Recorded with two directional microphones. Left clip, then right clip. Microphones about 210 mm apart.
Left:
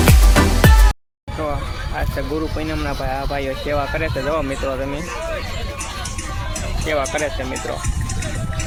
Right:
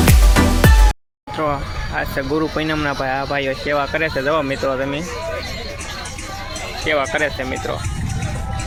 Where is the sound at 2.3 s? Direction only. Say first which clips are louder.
Right 6 dB; 20° right (ahead or behind).